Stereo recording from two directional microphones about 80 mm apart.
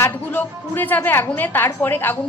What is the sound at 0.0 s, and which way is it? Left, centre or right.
A woman's voice, left.